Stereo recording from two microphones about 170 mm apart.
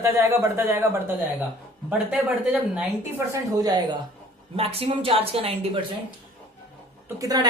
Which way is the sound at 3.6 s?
25° right (ahead or behind).